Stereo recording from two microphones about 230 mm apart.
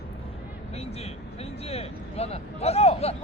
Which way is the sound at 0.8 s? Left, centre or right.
Left.